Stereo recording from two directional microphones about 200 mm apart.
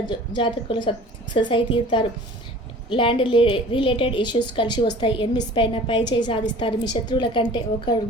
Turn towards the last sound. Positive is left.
turn(degrees=25)  # may be behind; listen again after turning